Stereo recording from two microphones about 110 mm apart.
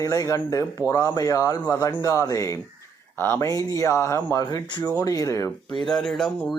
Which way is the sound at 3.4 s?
30° left (ahead or behind).